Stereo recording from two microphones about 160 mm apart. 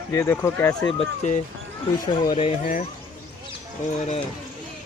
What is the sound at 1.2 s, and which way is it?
Speech, 50° left (ahead or behind).